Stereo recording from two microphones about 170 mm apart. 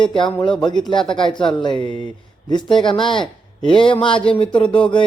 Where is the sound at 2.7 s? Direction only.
30° left (ahead or behind).